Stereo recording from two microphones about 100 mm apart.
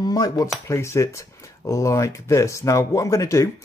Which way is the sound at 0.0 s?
40° left (ahead or behind).